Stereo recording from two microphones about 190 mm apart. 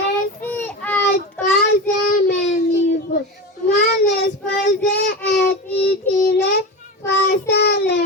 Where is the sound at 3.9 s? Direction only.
65° left (ahead or behind).